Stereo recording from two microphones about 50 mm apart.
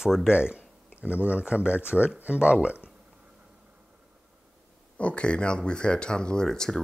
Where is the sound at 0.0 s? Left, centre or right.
Centre.